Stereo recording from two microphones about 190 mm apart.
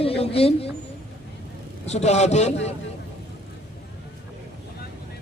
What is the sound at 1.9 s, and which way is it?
Speech, 35° left (ahead or behind).